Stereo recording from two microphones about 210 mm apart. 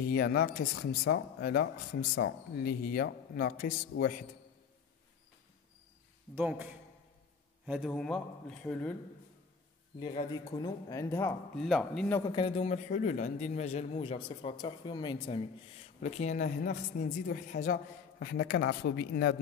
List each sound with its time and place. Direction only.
0.0 s speech: 45° left (ahead or behind)
6.3 s a man's voice: 5° right (ahead or behind)
10.6 s a man's voice: 15° left (ahead or behind)
11.6 s a man's voice: centre (ahead or behind)
12.2 s a man's voice: 20° left (ahead or behind)
16.0 s speech: 35° left (ahead or behind); by 19.3 s 50° left (ahead or behind)